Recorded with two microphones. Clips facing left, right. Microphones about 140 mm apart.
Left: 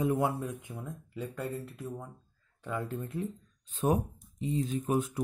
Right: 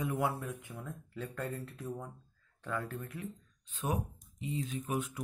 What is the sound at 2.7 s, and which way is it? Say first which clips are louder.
Speech: left 3 dB; 20° left (ahead or behind).